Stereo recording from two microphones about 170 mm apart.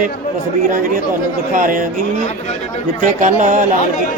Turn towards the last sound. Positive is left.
turn(degrees=-45)  # may be behind; listen again after turning